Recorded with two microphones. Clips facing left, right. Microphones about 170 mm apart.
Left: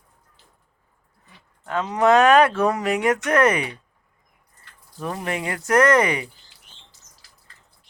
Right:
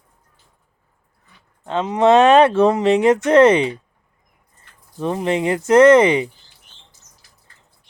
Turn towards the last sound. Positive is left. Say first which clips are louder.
# right 7 dB
turn(degrees=-25)  # may be behind; listen again after turning